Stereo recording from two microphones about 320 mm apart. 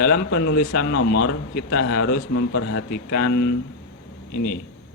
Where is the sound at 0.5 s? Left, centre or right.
Left.